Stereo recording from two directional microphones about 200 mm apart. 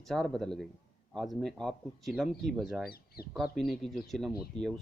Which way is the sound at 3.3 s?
Centre (ahead or behind).